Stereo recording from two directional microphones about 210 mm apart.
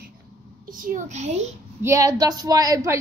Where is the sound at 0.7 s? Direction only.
40° right (ahead or behind).